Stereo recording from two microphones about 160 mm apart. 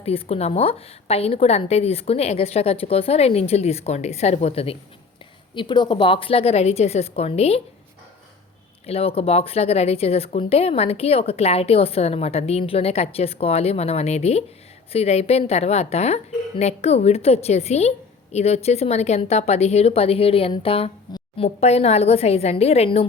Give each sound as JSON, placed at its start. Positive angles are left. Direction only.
{"t": 0.0, "sound": "a woman's voice", "side_deg": 40}
{"t": 8.9, "sound": "a woman's voice", "side_deg": 40}